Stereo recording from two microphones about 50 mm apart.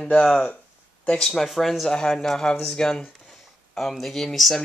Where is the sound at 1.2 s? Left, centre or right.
Centre.